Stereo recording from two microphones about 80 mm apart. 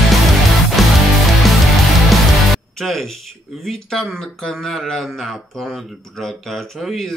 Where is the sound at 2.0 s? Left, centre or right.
Centre.